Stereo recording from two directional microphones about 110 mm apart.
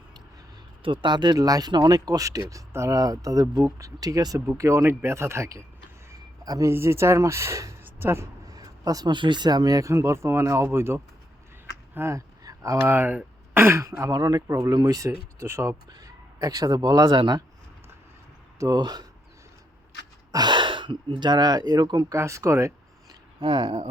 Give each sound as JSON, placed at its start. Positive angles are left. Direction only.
{"t": 0.8, "sound": "speech", "side_deg": -45}
{"t": 6.1, "sound": "a sound", "side_deg": -35}
{"t": 6.7, "sound": "speech", "side_deg": -25}
{"t": 11.9, "sound": "a sound", "side_deg": -25}
{"t": 12.8, "sound": "speech", "side_deg": -20}
{"t": 18.6, "sound": "speech", "side_deg": -40}
{"t": 20.3, "sound": "speech", "side_deg": -40}
{"t": 22.1, "sound": "speech", "side_deg": -25}
{"t": 23.4, "sound": "speech", "side_deg": -45}